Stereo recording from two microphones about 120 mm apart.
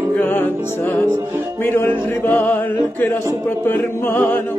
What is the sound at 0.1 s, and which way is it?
Music, 15° left (ahead or behind).